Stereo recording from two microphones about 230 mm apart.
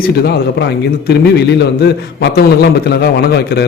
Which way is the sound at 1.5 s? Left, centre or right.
Left.